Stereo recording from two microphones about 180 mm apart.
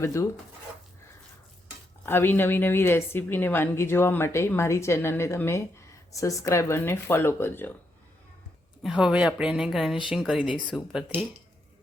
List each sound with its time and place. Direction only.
0.0 s a woman's voice: 15° left (ahead or behind)
2.0 s a woman's voice: 10° left (ahead or behind)
8.8 s speech: 5° right (ahead or behind)